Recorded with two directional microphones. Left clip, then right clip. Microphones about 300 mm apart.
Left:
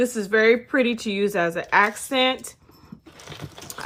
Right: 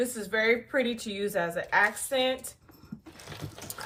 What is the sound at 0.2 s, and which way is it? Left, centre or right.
Speech, left.